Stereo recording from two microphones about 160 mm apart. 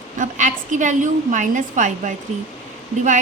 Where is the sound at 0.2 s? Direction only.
50° right (ahead or behind).